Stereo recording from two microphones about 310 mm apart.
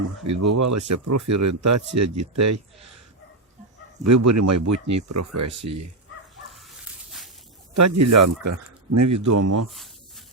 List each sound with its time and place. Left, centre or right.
0.3 s speech: right
4.0 s speech: right
7.8 s speech: right
9.6 s a sound: centre